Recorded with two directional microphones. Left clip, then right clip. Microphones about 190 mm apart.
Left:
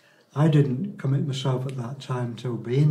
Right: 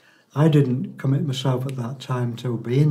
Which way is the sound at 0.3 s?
25° right (ahead or behind).